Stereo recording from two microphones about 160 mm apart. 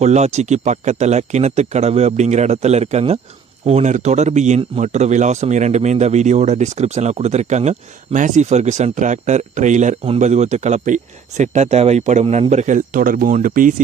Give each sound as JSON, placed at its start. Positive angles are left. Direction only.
{"t": 0.0, "sound": "a man's voice", "side_deg": -45}